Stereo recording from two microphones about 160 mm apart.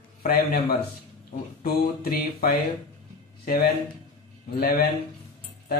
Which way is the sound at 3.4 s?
70° left (ahead or behind).